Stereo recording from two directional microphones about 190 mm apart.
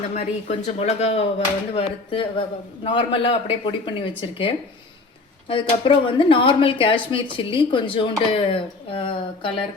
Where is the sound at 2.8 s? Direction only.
25° left (ahead or behind).